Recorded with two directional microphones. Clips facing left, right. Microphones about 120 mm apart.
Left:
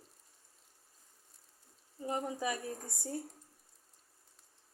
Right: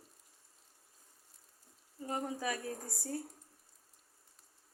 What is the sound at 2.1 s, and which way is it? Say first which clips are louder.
A woman's voice: left 1 dB; 20° left (ahead or behind).